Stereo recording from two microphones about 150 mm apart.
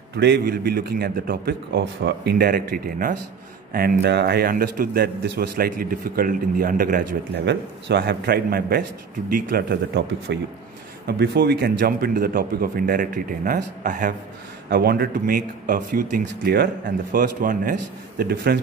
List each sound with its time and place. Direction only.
0.1 s a man's voice: 90° right; by 3.2 s 70° right (ahead or behind)
3.7 s a man's voice: 85° right; by 7.1 s 65° right (ahead or behind)
8.1 s a man's voice: 90° right
11.1 s speech: 90° right; by 14.1 s 60° right (ahead or behind)
14.7 s speech: 90° right